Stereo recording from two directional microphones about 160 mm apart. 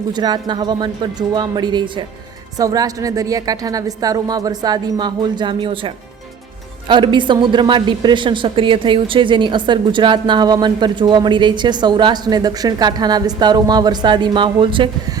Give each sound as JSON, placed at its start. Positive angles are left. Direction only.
{"t": 0.1, "sound": "a woman's voice", "side_deg": -25}